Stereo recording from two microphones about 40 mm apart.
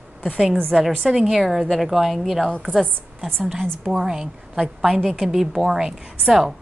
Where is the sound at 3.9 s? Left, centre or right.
Centre.